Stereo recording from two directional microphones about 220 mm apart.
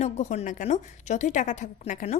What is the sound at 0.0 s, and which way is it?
A woman's voice, 30° left (ahead or behind).